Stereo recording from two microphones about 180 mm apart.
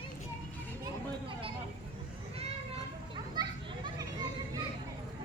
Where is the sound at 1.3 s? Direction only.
30° right (ahead or behind).